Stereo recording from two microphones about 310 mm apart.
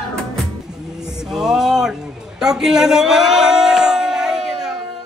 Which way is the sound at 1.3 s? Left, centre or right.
Centre.